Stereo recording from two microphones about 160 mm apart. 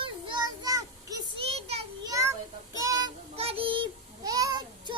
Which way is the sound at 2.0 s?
20° right (ahead or behind).